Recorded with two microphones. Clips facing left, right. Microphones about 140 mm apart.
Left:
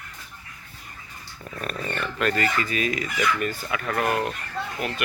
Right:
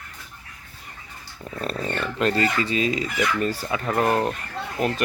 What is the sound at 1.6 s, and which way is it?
Fowl, 25° right (ahead or behind).